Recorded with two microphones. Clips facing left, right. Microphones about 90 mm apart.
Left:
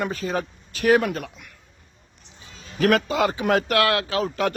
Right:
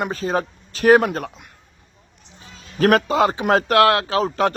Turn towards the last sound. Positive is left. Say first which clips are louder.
# right 4 dB
turn(degrees=-40)  # may be behind; listen again after turning